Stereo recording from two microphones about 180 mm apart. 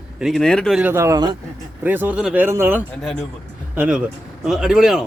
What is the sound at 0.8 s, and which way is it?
Speech, 15° right (ahead or behind).